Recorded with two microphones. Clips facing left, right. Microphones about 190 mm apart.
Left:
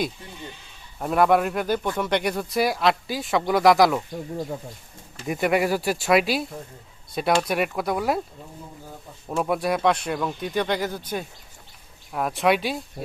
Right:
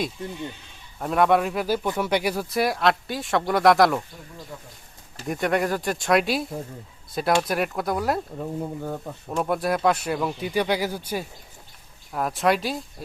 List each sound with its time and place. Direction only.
0.9 s a man's voice: centre (ahead or behind)
5.2 s a man's voice: 5° left (ahead or behind)
8.4 s speech: 65° right (ahead or behind)
9.3 s a man's voice: centre (ahead or behind)